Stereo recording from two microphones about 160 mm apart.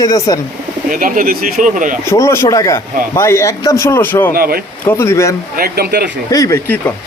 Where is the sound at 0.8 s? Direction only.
60° right (ahead or behind).